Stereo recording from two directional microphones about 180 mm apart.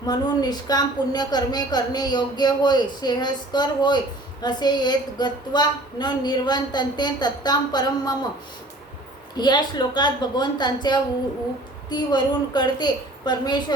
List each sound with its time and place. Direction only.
0.0 s a woman's voice: 20° left (ahead or behind)
9.4 s a woman's voice: 25° left (ahead or behind)